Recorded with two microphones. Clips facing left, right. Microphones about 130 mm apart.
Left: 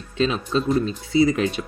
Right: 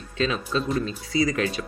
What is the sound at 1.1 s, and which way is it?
Speech, 25° left (ahead or behind).